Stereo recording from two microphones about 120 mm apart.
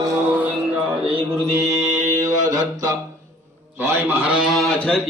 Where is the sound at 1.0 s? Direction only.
50° right (ahead or behind).